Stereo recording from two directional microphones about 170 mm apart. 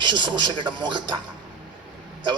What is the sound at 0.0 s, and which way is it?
Speech, 25° right (ahead or behind).